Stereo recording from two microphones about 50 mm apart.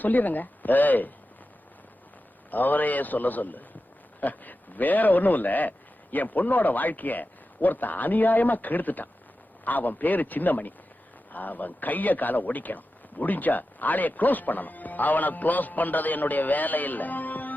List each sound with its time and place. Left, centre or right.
0.0 s speech: left
2.5 s speech: left